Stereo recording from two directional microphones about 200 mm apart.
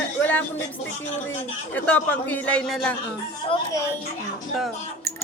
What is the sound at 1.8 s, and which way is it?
A man's voice, 10° left (ahead or behind).